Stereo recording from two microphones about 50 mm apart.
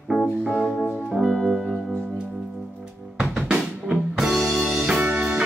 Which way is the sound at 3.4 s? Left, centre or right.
Right.